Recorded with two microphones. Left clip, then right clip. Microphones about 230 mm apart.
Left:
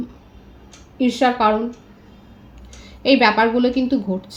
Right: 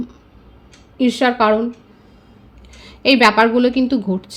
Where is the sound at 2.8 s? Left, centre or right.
Right.